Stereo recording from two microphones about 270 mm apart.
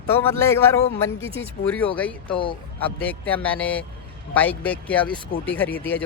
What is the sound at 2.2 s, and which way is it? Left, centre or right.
Speech, centre.